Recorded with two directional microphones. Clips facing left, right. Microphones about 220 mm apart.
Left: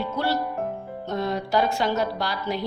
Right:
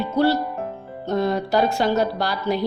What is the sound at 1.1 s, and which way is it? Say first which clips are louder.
A woman's voice: right 5 dB; 35° right (ahead or behind).